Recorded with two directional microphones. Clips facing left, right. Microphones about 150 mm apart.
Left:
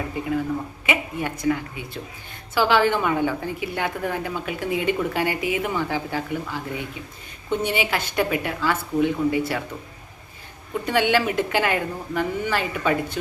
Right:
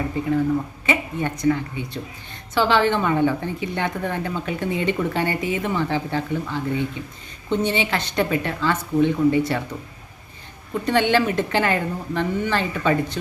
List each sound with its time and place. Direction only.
0.9 s a woman's voice: 10° left (ahead or behind)
10.8 s a woman's voice: 5° left (ahead or behind)